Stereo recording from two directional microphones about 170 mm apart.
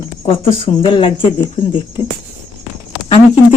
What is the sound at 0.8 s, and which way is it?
Speech, 30° left (ahead or behind).